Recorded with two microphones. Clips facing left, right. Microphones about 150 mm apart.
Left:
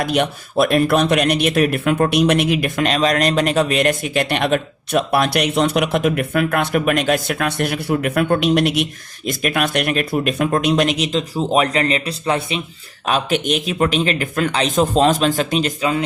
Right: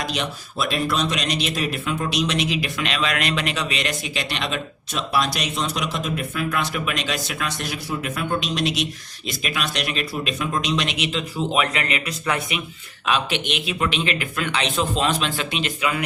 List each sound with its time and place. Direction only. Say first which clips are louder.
0.0 s speech: left 8 dB; 55° left (ahead or behind); by 12.6 s 30° left (ahead or behind)
13.1 s a man's voice: left 5 dB; 45° left (ahead or behind)